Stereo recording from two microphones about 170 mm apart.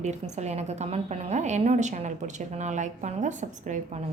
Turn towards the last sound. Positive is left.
turn(degrees=-45)  # may be behind; listen again after turning